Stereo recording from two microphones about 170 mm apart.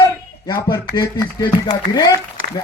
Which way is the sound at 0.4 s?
25° left (ahead or behind).